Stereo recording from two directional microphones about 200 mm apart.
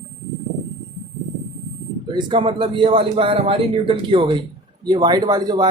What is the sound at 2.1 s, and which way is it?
Speech, 25° right (ahead or behind).